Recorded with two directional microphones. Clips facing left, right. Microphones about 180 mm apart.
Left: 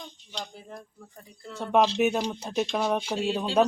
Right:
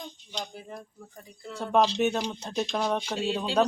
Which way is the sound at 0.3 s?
Centre (ahead or behind).